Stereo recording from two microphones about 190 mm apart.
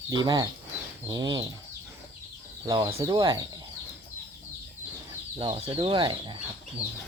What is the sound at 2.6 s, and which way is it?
Speech, 20° right (ahead or behind).